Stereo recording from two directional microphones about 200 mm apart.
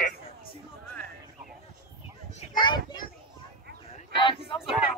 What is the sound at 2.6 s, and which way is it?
Children playing, 25° left (ahead or behind).